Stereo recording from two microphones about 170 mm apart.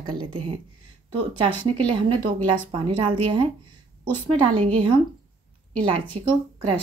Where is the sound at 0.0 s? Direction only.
30° right (ahead or behind).